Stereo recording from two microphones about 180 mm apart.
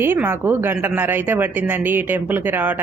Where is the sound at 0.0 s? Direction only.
10° right (ahead or behind).